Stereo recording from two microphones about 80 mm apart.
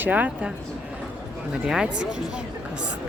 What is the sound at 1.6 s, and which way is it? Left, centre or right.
Speech, centre.